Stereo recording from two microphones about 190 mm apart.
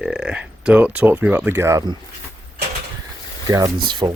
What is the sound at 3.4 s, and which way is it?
Speech, 20° right (ahead or behind).